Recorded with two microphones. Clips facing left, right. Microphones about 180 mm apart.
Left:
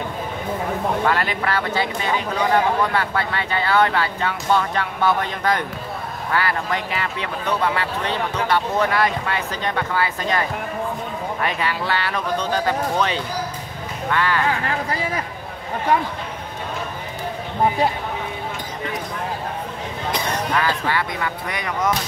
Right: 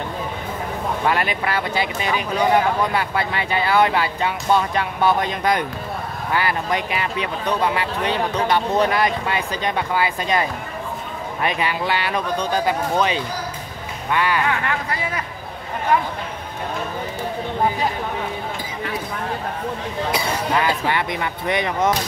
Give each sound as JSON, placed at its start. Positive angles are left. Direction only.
{"t": 1.0, "sound": "speech", "side_deg": -15}
{"t": 11.4, "sound": "speech", "side_deg": -15}
{"t": 14.5, "sound": "speech", "side_deg": 30}
{"t": 20.1, "sound": "speech", "side_deg": -10}
{"t": 20.5, "sound": "speech", "side_deg": -20}